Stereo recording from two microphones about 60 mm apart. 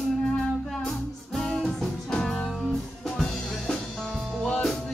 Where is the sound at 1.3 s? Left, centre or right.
Centre.